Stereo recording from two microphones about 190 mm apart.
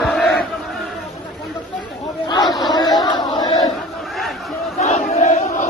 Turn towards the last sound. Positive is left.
turn(degrees=40)  # may be behind; listen again after turning